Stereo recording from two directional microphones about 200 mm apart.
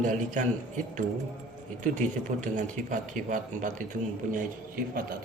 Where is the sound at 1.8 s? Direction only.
40° right (ahead or behind).